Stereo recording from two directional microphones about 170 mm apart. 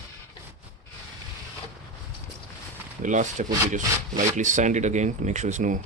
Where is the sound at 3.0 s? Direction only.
45° right (ahead or behind).